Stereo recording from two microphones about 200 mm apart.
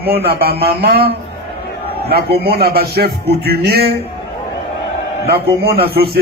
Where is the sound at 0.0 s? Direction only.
50° right (ahead or behind).